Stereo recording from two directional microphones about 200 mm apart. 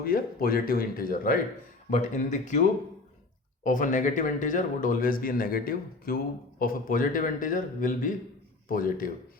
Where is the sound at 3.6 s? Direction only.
40° left (ahead or behind).